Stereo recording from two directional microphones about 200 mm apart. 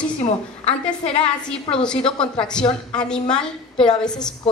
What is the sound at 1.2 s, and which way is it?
A woman's voice, 5° left (ahead or behind).